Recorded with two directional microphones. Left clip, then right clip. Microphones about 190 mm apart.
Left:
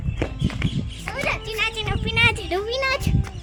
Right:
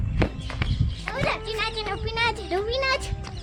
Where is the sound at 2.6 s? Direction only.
60° left (ahead or behind).